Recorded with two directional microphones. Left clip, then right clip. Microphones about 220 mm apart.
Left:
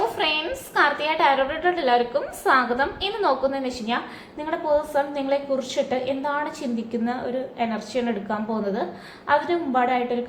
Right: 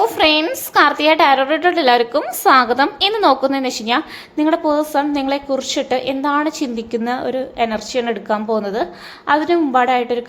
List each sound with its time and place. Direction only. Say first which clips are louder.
0.2 s a woman's voice: right 9 dB; 45° right (ahead or behind)